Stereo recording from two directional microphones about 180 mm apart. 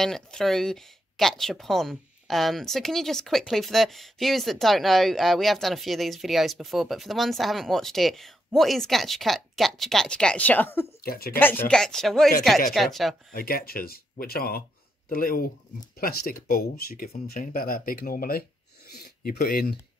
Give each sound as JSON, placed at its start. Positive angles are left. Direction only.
{"t": 0.0, "sound": "speech", "side_deg": 5}
{"t": 11.0, "sound": "speech", "side_deg": 55}
{"t": 11.3, "sound": "speech", "side_deg": 10}
{"t": 13.3, "sound": "speech", "side_deg": 55}